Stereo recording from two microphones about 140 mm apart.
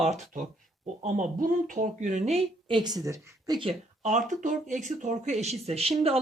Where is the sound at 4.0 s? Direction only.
60° right (ahead or behind).